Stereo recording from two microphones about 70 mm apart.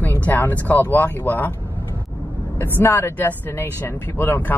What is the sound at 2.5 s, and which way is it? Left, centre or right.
Speech, left.